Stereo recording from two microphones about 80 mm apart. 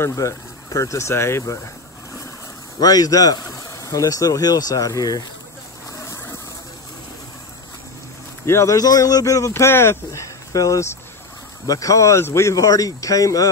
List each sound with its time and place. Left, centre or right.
0.0 s speech: left
2.8 s speech: left
8.5 s speech: left
8.7 s speech: left
10.5 s speech: left